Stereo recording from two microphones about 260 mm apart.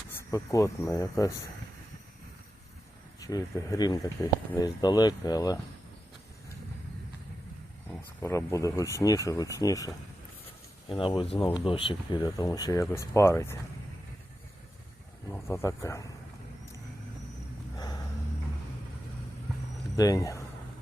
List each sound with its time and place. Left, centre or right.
0.2 s speech: centre
3.2 s speech: centre
7.9 s speech: centre
15.3 s speech: centre
20.0 s speech: centre